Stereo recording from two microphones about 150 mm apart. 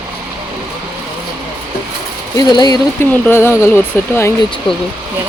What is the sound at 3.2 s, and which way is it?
Speech, 15° left (ahead or behind).